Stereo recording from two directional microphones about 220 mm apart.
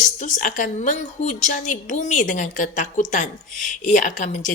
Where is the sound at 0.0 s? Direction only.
35° left (ahead or behind).